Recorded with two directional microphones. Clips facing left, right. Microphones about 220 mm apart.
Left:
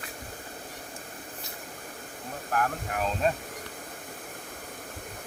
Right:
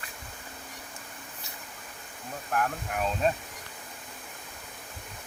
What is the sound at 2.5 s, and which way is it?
Speech, centre (ahead or behind).